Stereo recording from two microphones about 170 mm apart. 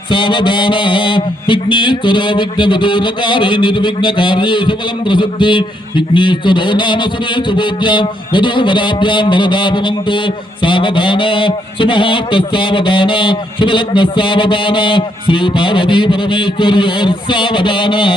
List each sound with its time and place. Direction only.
0.1 s a man's voice: 30° left (ahead or behind)